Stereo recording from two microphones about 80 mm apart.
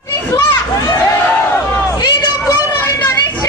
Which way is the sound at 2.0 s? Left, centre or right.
Left.